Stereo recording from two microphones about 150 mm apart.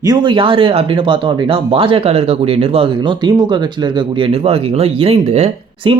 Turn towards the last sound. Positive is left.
turn(degrees=-40)  # may be behind; listen again after turning